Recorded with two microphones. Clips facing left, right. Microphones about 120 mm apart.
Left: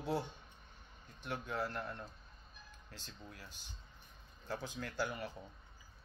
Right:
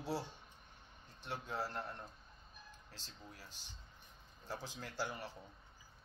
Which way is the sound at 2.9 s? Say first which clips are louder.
Left 4 dB; 30° right (ahead or behind).